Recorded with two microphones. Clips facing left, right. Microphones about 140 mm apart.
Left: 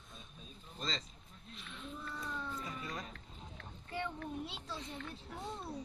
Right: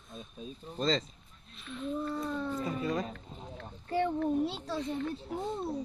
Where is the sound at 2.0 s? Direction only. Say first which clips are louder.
Right 10 dB; 40° right (ahead or behind); by 3.0 s 60° right (ahead or behind).